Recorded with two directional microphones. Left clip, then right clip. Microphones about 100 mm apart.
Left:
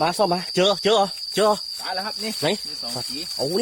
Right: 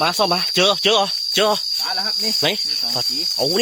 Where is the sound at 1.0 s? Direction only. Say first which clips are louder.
Right 2 dB; 5° left (ahead or behind).